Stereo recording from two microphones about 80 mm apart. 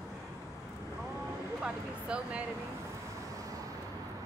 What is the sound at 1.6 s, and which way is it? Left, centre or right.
Speech, centre.